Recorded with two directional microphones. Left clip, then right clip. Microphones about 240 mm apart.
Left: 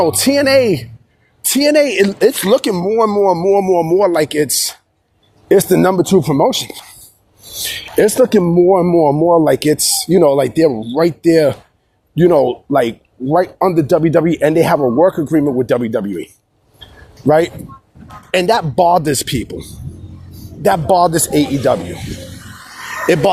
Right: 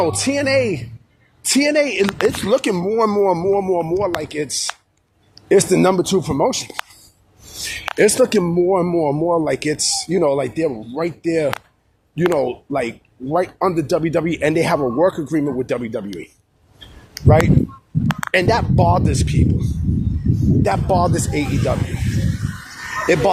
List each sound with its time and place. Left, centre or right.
0.0 s speech: left
2.7 s speech: centre
3.5 s speech: left
18.3 s speech: left
20.7 s speech: left
23.0 s speech: left